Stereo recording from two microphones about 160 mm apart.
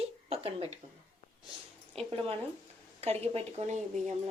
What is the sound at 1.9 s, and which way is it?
A woman's voice, 35° right (ahead or behind).